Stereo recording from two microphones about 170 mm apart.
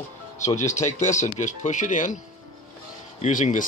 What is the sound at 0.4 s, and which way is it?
Speech, 45° left (ahead or behind).